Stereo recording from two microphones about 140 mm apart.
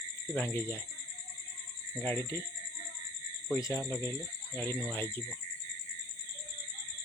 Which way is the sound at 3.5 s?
25° left (ahead or behind).